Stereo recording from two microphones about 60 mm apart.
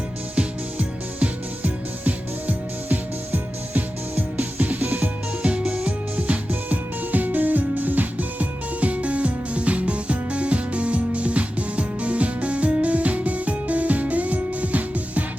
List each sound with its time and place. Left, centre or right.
0.3 s music: right